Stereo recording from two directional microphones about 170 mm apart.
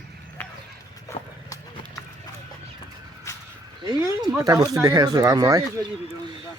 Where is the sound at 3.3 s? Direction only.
20° left (ahead or behind).